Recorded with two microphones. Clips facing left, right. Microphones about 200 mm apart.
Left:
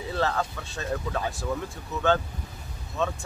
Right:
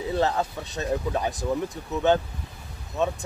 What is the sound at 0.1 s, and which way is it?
Speech, 20° right (ahead or behind).